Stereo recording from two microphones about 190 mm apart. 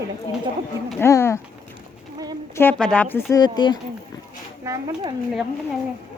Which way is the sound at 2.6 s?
5° left (ahead or behind).